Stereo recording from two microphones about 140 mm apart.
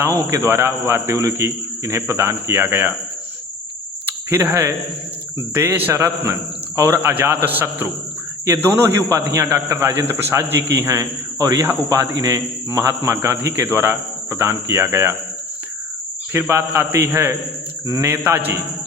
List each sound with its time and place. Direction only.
0.2 s a man's voice: 20° right (ahead or behind)
4.3 s a man's voice: 15° right (ahead or behind)
16.3 s a man's voice: 20° right (ahead or behind)